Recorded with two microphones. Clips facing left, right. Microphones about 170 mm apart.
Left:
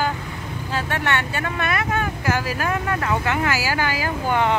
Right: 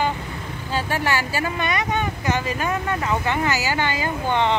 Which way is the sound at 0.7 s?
Centre (ahead or behind).